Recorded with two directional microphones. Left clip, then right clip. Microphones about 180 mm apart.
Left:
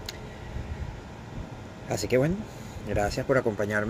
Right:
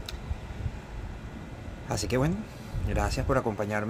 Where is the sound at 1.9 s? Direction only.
25° right (ahead or behind).